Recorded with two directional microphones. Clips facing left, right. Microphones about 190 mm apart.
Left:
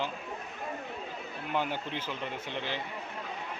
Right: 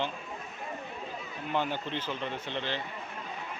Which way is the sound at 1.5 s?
10° left (ahead or behind).